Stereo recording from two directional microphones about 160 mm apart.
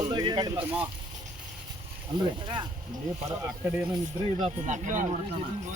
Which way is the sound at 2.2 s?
30° right (ahead or behind).